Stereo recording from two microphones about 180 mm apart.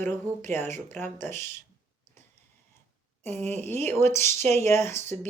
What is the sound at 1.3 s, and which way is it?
Speech, 40° right (ahead or behind).